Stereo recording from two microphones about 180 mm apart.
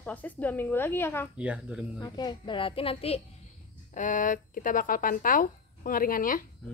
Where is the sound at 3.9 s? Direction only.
45° left (ahead or behind).